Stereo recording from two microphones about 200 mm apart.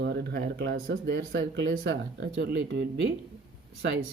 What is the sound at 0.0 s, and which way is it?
A man's voice, 55° right (ahead or behind).